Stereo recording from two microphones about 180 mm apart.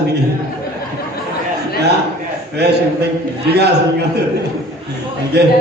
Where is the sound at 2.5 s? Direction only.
65° right (ahead or behind).